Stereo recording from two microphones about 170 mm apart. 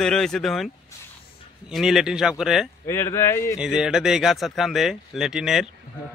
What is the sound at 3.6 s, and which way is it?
A man's voice, 5° right (ahead or behind).